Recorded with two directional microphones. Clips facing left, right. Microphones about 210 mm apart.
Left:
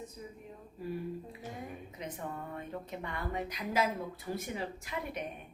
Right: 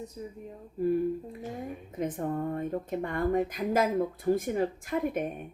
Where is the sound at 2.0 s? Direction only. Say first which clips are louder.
Right 12 dB; 50° right (ahead or behind).